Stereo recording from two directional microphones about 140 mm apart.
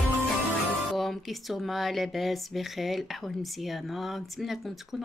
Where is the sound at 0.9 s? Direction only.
Centre (ahead or behind).